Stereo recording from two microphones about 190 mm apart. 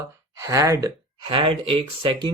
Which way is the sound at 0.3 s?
15° right (ahead or behind).